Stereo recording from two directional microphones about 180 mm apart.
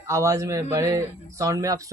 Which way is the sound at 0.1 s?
15° right (ahead or behind).